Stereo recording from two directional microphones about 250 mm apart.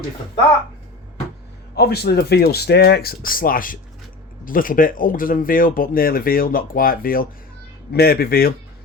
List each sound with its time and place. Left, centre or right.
1.7 s speech: left